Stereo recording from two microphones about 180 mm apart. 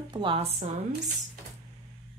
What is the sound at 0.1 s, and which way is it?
Speech, 30° right (ahead or behind).